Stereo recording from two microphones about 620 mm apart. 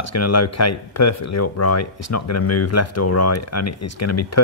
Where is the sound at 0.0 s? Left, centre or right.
Left.